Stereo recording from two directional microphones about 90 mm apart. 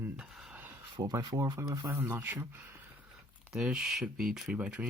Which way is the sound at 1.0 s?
40° right (ahead or behind).